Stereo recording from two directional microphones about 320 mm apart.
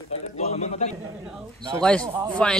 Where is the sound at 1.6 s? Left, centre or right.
Centre.